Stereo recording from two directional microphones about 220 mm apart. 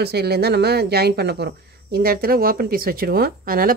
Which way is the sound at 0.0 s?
45° right (ahead or behind).